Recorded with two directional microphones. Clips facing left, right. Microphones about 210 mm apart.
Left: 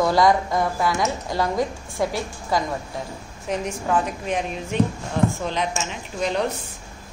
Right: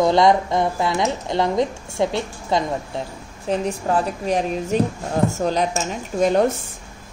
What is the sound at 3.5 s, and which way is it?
A woman's voice, 35° right (ahead or behind).